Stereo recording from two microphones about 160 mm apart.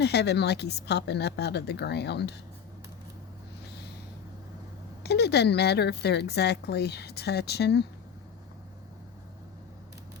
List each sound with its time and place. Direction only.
0.0 s a woman's voice: 90° left
5.0 s a woman's voice: 90° left